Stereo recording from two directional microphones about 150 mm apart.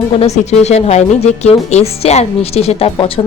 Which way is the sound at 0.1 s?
45° left (ahead or behind).